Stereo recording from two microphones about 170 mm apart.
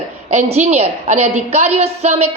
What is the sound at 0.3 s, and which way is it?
A woman's voice, 40° right (ahead or behind).